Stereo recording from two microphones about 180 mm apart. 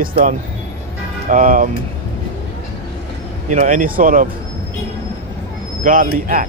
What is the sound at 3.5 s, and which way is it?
Speech, 45° right (ahead or behind).